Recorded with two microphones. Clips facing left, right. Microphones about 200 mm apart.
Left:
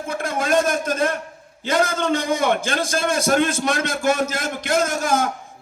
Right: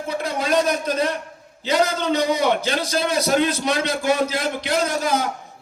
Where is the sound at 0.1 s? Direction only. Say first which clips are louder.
Left 1 dB; 50° left (ahead or behind).